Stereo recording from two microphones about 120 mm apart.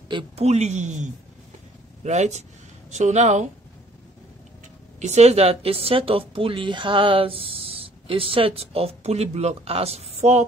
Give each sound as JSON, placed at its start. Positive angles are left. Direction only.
{"t": 0.4, "sound": "speech", "side_deg": -70}
{"t": 2.0, "sound": "speech", "side_deg": -70}
{"t": 5.0, "sound": "speech", "side_deg": -65}